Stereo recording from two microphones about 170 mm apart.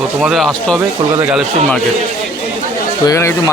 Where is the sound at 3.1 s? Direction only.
20° left (ahead or behind).